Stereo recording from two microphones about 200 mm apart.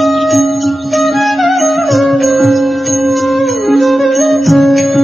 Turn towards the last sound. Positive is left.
turn(degrees=0)  # may be behind; listen again after turning